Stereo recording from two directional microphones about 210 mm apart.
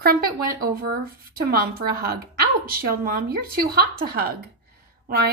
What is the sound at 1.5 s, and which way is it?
A woman's voice, 45° right (ahead or behind).